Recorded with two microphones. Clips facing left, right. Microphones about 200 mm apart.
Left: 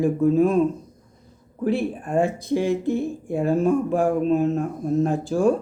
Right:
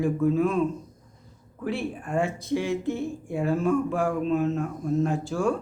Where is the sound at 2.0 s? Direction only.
35° left (ahead or behind).